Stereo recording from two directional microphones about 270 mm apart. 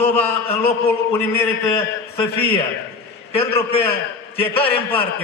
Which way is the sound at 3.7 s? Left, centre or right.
Left.